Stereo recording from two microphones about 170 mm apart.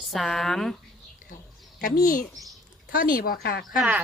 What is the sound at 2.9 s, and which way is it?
Speech, 55° left (ahead or behind).